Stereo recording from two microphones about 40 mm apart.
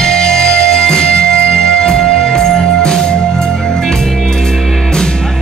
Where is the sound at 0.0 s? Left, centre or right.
Centre.